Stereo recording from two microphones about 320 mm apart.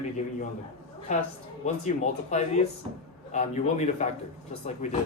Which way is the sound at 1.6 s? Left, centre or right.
Left.